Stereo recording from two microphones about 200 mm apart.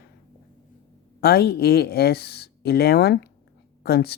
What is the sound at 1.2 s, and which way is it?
Speech, 55° left (ahead or behind).